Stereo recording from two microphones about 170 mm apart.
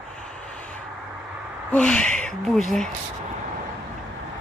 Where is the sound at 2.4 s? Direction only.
Centre (ahead or behind).